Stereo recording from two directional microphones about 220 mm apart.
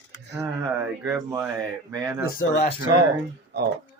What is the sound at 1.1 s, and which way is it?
Speech, 10° right (ahead or behind).